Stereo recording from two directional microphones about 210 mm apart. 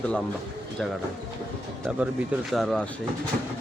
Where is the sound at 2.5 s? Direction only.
Centre (ahead or behind).